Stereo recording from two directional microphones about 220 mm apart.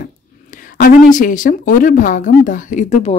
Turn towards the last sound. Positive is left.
turn(degrees=30)  # may be behind; listen again after turning